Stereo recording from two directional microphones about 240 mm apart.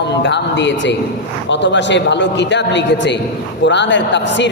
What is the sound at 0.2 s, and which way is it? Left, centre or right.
A man's voice, left.